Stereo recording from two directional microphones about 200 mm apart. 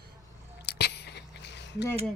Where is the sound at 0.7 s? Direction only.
55° left (ahead or behind).